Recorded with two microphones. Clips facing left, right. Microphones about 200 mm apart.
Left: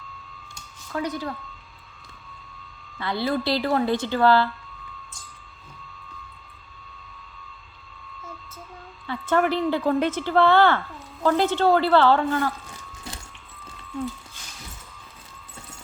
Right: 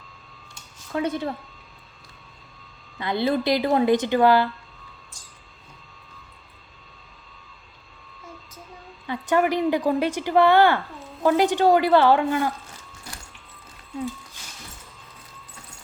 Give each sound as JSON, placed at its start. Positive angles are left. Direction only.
{"t": 0.9, "sound": "a woman's voice", "side_deg": -25}
{"t": 3.0, "sound": "a woman's voice", "side_deg": -20}
{"t": 9.0, "sound": "a woman's voice", "side_deg": -15}